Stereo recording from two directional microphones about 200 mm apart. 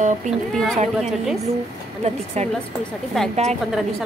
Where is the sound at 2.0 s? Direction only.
35° right (ahead or behind).